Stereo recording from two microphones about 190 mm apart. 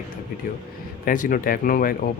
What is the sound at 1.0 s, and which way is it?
Speech, 45° left (ahead or behind).